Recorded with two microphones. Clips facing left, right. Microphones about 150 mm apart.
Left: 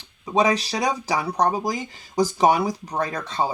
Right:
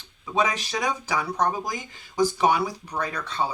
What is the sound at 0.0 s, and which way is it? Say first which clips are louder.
Speech: left 4 dB; 35° left (ahead or behind).